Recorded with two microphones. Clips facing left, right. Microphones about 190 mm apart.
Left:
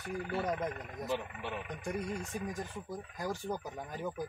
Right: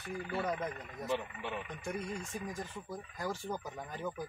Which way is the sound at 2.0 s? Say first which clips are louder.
Left 2 dB; 40° left (ahead or behind).